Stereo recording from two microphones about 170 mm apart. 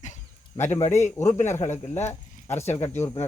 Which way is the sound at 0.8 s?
40° left (ahead or behind).